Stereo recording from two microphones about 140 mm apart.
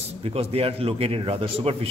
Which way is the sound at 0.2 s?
45° right (ahead or behind).